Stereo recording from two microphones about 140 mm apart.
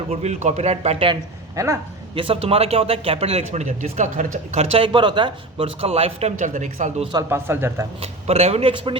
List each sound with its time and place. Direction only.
0.1 s speech: 55° right (ahead or behind)
1.5 s a man's voice: 20° right (ahead or behind)
2.1 s speech: 40° right (ahead or behind); by 6.9 s 65° right (ahead or behind)
7.0 s a man's voice: 30° right (ahead or behind)
7.3 s speech: 15° right (ahead or behind)
8.0 s speech: 45° right (ahead or behind)